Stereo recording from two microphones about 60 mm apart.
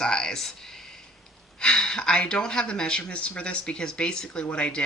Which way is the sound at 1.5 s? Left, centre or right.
Centre.